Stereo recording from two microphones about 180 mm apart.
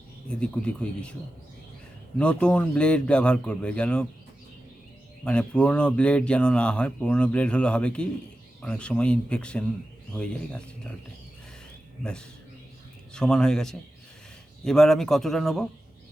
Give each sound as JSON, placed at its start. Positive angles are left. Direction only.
{"t": 0.3, "sound": "speech", "side_deg": 5}
{"t": 2.1, "sound": "speech", "side_deg": 5}
{"t": 5.2, "sound": "speech", "side_deg": 5}
{"t": 13.1, "sound": "speech", "side_deg": 5}